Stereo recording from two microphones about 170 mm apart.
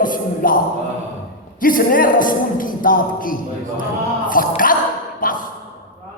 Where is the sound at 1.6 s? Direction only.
55° left (ahead or behind).